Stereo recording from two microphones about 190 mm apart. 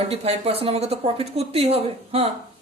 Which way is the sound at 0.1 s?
30° right (ahead or behind).